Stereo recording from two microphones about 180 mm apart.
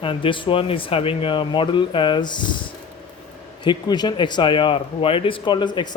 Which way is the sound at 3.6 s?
25° left (ahead or behind).